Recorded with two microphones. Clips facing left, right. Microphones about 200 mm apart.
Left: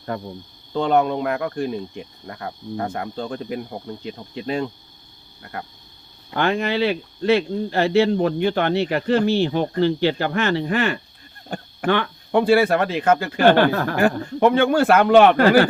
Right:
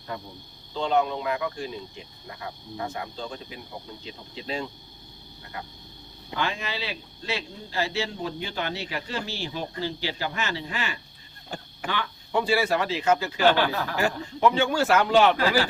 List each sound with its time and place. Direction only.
0.1 s speech: 55° left (ahead or behind)
5.4 s a sound: 55° left (ahead or behind)
6.3 s speech: 60° left (ahead or behind)